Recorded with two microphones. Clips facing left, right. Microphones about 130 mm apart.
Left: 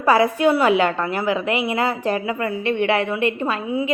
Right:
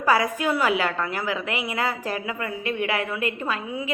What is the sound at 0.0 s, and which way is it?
A woman's voice, 30° left (ahead or behind).